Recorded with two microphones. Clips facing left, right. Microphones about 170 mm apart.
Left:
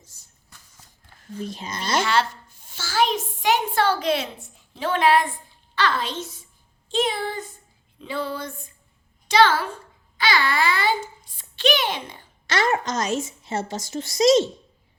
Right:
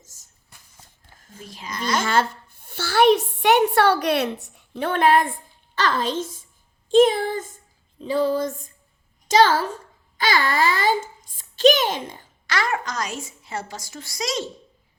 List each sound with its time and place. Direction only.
0.0 s a sound: 45° right (ahead or behind)
1.4 s a woman's voice: 25° left (ahead or behind)
2.0 s a woman's voice: 50° right (ahead or behind)
8.0 s a sound: 40° right (ahead or behind)
9.2 s a child's voice: 40° right (ahead or behind)
12.5 s a woman's voice: 25° left (ahead or behind)